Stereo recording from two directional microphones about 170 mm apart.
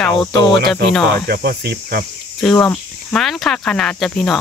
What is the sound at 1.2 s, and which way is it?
Cricket, 65° right (ahead or behind).